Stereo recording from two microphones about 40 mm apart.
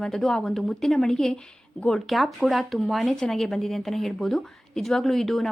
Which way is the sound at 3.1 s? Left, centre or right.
Centre.